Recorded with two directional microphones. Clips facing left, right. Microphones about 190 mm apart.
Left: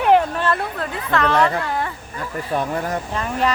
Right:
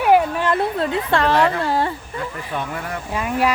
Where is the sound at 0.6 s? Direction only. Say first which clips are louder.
Right 6 dB; 25° right (ahead or behind).